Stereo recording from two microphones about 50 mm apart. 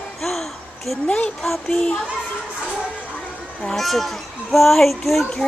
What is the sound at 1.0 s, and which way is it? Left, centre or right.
Speech, left.